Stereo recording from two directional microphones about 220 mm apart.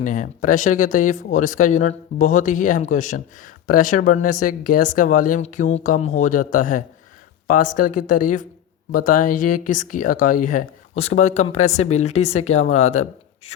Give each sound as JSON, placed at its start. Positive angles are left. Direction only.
{"t": 0.0, "sound": "speech", "side_deg": 35}